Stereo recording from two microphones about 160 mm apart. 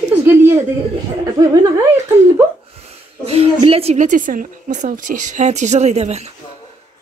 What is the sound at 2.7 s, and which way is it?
A woman's voice, 40° right (ahead or behind).